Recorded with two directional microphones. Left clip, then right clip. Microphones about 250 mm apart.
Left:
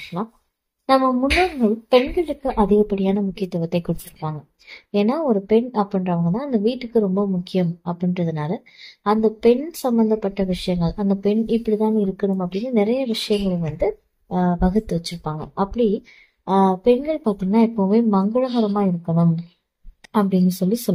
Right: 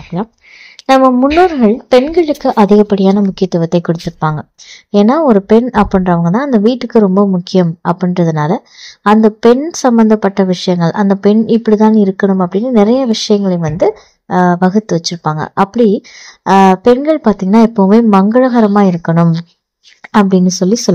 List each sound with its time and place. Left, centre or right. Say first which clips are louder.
0.1 s a woman's voice: right 9 dB; right
1.6 s a woman's voice: right 8 dB; right